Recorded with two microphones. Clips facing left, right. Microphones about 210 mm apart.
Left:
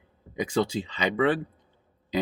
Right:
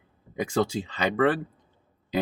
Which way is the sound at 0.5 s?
50° right (ahead or behind).